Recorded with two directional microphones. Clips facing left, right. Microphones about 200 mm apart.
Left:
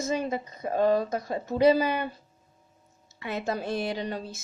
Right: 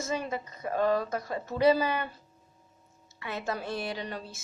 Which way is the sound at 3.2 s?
20° left (ahead or behind).